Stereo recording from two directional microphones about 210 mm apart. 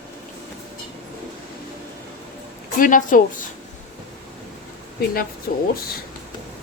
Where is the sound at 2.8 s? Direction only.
40° left (ahead or behind).